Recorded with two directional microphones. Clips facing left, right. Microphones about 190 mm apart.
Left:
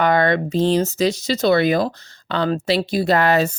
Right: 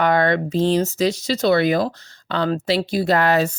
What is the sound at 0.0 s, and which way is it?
Speech, 20° left (ahead or behind).